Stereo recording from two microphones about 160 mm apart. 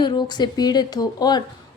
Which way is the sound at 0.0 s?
25° left (ahead or behind).